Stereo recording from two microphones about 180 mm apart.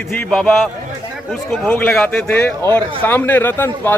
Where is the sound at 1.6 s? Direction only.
10° left (ahead or behind).